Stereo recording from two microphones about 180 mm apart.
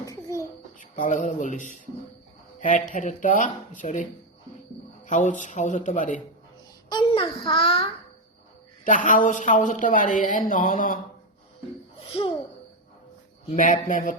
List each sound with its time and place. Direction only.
0.0 s a sound: 15° left (ahead or behind)
0.8 s speech: 45° left (ahead or behind)
6.9 s a child's voice: 30° left (ahead or behind)
8.8 s speech: 45° left (ahead or behind)
13.5 s speech: 45° left (ahead or behind)